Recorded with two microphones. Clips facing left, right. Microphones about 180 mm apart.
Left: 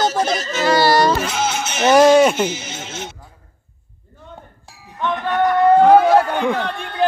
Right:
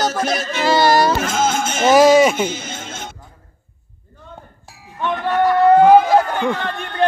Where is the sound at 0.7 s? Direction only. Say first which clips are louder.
Even; 20° right (ahead or behind).